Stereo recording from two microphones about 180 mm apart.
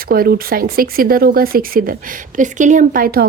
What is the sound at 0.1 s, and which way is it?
Speech, 55° right (ahead or behind).